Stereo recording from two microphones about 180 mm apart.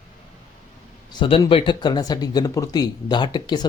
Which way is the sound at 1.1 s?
30° left (ahead or behind).